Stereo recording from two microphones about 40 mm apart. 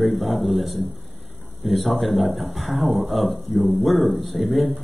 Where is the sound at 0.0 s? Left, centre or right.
Centre.